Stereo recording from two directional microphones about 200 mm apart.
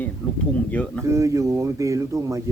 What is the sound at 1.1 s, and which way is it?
Speech, 15° right (ahead or behind).